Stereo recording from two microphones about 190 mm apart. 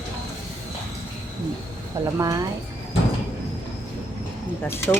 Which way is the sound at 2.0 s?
15° right (ahead or behind).